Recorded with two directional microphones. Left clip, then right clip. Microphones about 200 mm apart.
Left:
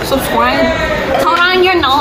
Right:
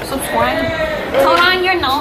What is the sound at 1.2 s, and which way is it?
Speech, 15° left (ahead or behind).